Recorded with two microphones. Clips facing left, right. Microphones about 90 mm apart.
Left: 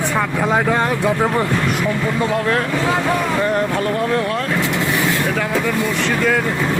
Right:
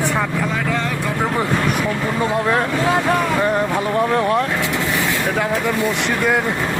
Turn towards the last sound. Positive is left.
turn(degrees=-20)  # may be behind; listen again after turning